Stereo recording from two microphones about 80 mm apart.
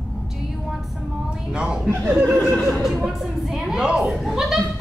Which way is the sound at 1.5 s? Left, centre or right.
Centre.